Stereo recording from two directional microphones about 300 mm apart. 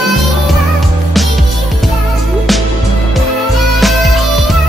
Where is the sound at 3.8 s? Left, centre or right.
Centre.